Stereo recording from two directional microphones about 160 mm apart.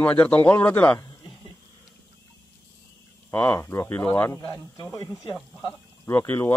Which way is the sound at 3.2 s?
10° left (ahead or behind).